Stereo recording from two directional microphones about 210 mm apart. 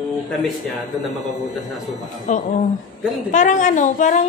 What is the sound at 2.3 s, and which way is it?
Speech, 35° left (ahead or behind).